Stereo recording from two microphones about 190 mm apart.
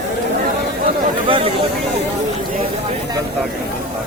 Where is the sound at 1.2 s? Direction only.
30° right (ahead or behind).